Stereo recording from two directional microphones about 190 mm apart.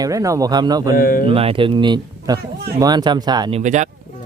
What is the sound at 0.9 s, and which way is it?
Speech, 50° left (ahead or behind).